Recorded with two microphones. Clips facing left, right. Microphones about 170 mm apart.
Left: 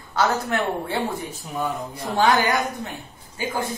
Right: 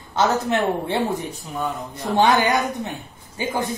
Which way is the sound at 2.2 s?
25° right (ahead or behind).